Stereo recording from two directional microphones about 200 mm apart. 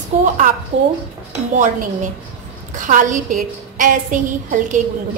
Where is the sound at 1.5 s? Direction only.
40° right (ahead or behind).